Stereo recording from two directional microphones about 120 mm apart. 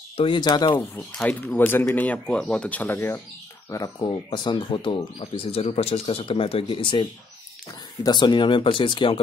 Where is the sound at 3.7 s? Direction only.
30° left (ahead or behind).